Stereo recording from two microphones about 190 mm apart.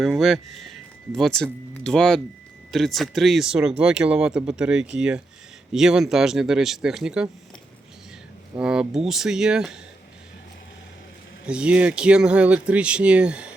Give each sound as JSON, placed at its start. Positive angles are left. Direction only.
{"t": 0.0, "sound": "speech", "side_deg": 0}
{"t": 8.5, "sound": "speech", "side_deg": -5}
{"t": 11.4, "sound": "speech", "side_deg": -5}